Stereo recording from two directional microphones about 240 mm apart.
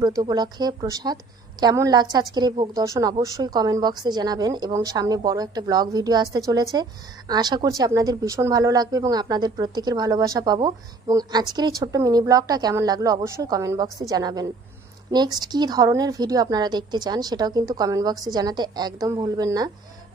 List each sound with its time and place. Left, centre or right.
0.2 s a woman's voice: centre